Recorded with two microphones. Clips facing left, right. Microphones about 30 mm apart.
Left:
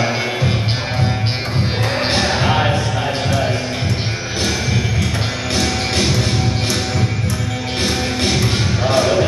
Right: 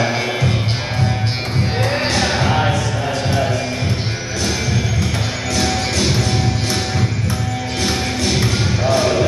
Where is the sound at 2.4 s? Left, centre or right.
Centre.